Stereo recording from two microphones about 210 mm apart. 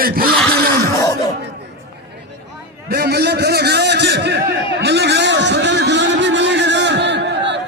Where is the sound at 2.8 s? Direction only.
50° right (ahead or behind).